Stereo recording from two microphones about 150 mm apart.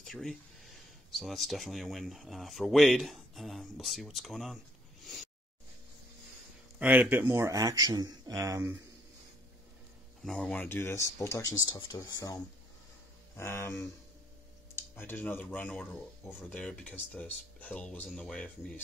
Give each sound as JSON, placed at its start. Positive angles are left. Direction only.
{"t": 0.0, "sound": "speech", "side_deg": 0}
{"t": 6.8, "sound": "a man's voice", "side_deg": -10}
{"t": 10.2, "sound": "speech", "side_deg": 5}
{"t": 13.4, "sound": "speech", "side_deg": 20}